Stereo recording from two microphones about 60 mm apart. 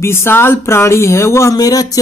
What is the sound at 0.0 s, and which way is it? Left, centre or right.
Speech, left.